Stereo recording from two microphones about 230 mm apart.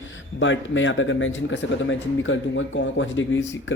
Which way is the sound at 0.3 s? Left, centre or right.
Left.